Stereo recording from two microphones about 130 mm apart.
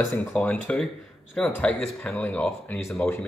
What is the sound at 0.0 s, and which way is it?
Speech, 15° left (ahead or behind).